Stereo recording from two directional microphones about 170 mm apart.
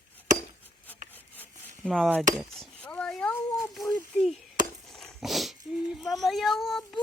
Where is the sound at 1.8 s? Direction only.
Centre (ahead or behind).